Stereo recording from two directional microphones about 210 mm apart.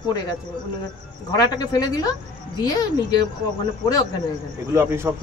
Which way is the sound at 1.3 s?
20° left (ahead or behind).